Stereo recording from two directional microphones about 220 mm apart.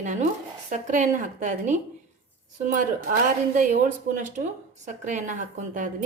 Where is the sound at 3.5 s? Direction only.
40° right (ahead or behind).